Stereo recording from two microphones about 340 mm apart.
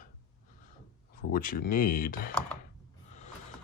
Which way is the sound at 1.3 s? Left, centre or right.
Left.